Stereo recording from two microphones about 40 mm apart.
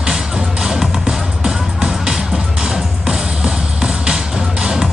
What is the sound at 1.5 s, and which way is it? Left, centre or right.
Music, centre.